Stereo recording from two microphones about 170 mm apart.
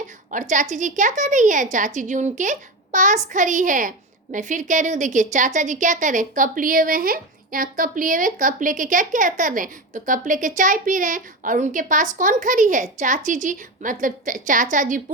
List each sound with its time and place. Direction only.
0.3 s a woman's voice: 50° right (ahead or behind)